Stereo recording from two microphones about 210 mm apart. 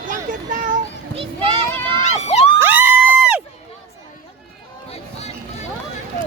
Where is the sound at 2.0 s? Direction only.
30° left (ahead or behind).